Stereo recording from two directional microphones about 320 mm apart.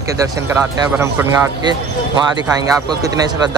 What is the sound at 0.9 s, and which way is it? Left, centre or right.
Speech, centre.